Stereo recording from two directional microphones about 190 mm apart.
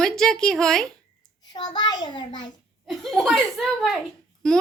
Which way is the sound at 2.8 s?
Centre (ahead or behind).